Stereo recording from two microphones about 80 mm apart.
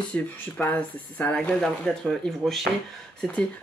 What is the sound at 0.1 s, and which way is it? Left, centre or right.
Speech, centre.